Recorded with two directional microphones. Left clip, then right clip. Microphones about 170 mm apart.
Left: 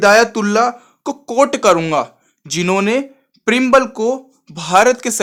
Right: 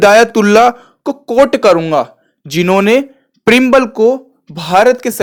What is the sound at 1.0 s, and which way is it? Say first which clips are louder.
Speech: right 4 dB; 15° right (ahead or behind).